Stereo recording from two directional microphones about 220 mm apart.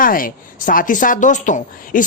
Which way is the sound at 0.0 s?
40° left (ahead or behind).